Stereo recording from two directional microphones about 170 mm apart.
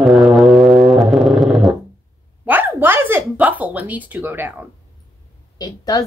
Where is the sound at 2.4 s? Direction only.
10° right (ahead or behind).